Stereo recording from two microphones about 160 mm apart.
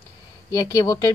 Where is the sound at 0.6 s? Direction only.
20° left (ahead or behind).